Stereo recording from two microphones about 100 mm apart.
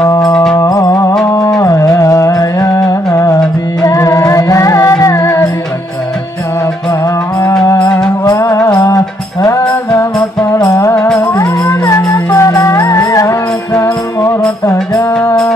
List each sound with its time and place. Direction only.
0.2 s music: 5° left (ahead or behind)
0.6 s music: 40° left (ahead or behind)
7.8 s music: 10° left (ahead or behind)
8.3 s music: 35° left (ahead or behind)